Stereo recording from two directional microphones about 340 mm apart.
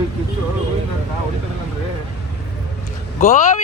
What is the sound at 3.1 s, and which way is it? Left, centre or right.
Speech, left.